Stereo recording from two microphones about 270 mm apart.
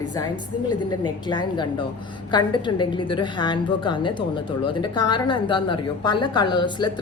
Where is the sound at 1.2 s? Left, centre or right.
Centre.